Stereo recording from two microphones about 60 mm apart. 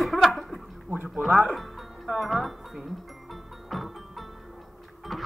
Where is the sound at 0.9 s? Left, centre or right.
Right.